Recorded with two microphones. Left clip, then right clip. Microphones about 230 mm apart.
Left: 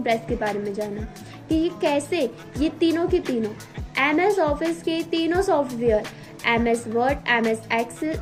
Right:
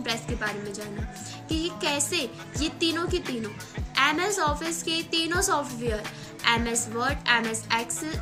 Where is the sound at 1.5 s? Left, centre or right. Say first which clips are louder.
Left 6 dB; centre.